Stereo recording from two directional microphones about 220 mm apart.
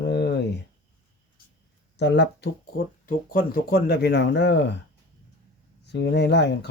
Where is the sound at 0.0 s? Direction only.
50° left (ahead or behind).